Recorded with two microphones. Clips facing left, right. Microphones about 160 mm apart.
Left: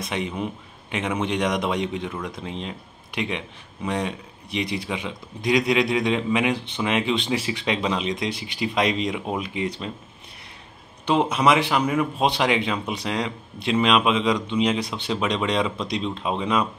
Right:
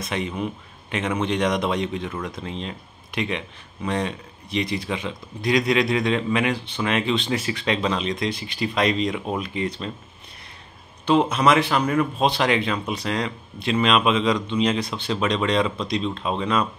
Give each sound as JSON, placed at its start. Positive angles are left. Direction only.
{"t": 0.0, "sound": "speech", "side_deg": 15}
{"t": 11.1, "sound": "speech", "side_deg": 15}